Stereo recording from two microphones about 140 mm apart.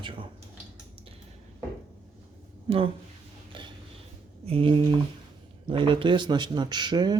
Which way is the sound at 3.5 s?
35° right (ahead or behind).